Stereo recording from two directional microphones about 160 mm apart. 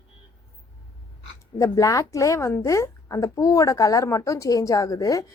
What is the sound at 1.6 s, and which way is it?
A woman's voice, 20° left (ahead or behind).